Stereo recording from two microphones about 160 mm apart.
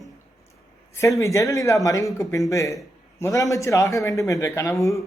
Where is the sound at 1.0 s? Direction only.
20° left (ahead or behind).